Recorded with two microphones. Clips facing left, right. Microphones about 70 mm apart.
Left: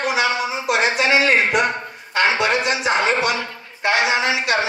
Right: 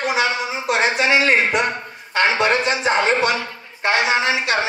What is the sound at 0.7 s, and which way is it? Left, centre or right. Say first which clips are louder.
Speech: even; right.